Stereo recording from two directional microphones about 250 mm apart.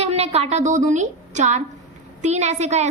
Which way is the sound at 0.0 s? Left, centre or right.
Right.